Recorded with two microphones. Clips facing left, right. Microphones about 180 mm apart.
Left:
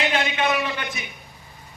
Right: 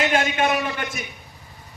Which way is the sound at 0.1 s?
45° right (ahead or behind).